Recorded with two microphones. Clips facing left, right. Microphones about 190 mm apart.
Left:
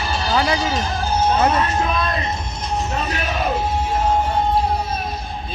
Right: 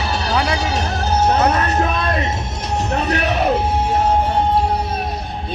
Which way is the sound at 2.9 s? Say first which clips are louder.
Right 5 dB; 70° right (ahead or behind).